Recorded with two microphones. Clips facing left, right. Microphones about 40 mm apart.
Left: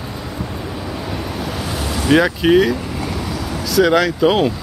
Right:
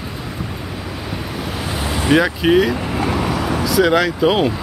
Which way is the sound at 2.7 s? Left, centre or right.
Right.